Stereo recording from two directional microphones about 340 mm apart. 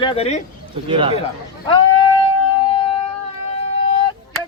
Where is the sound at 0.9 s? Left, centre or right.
Centre.